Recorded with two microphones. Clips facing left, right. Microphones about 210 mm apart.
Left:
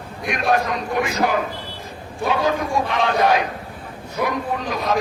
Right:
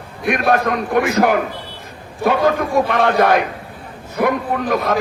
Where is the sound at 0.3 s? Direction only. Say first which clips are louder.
Right 4 dB; 60° right (ahead or behind).